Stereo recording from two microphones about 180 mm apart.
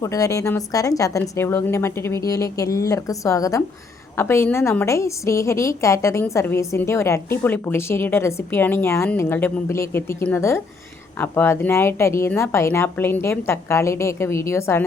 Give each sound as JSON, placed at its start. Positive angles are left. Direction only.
{"t": 0.0, "sound": "a woman's voice", "side_deg": 20}